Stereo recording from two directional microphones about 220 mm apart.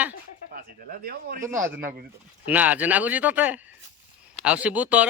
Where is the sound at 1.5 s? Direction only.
10° right (ahead or behind).